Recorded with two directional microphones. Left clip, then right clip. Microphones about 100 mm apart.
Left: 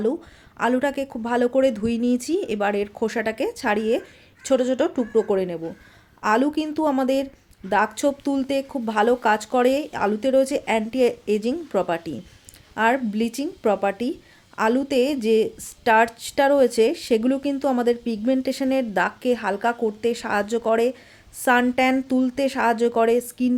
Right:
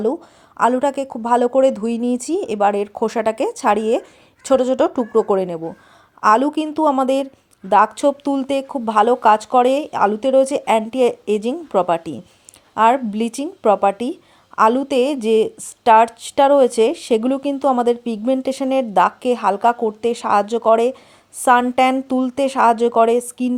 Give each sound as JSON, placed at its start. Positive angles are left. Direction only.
{"t": 0.0, "sound": "speech", "side_deg": -30}